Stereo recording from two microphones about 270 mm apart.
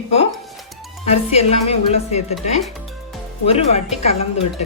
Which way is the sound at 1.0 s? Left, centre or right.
Left.